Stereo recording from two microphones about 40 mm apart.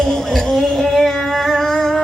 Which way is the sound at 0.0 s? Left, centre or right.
Centre.